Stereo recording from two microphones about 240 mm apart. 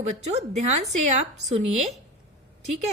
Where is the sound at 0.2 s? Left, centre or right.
Right.